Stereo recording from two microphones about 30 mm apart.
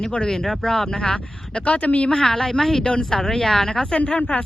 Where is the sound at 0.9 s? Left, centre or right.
Left.